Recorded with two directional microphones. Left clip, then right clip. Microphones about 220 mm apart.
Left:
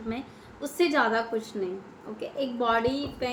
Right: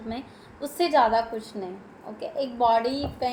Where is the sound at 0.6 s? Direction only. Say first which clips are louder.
Right 3 dB; 5° left (ahead or behind).